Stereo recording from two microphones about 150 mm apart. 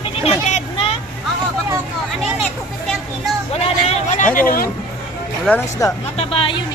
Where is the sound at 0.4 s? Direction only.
50° left (ahead or behind).